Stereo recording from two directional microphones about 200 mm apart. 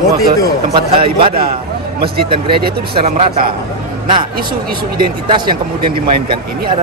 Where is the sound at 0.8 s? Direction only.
25° right (ahead or behind).